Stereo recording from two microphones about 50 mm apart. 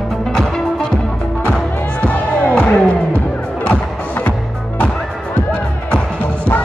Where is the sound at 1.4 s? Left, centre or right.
Left.